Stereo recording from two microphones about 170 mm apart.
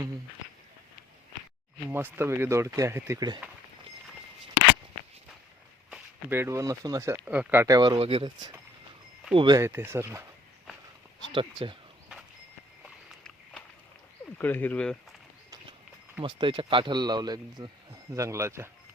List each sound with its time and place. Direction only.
1.9 s speech: 10° right (ahead or behind)
5.9 s speech: 15° right (ahead or behind)
7.8 s speech: 30° right (ahead or behind)
9.6 s speech: 15° right (ahead or behind)
11.3 s speech: 30° right (ahead or behind)
14.3 s speech: 10° left (ahead or behind)
16.2 s speech: 30° right (ahead or behind)